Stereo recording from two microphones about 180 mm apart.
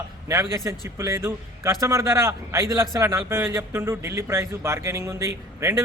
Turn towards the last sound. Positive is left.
turn(degrees=-15)  # may be behind; listen again after turning